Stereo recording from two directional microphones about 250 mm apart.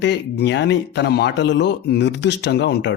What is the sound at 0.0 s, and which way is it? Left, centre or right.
A man's voice, left.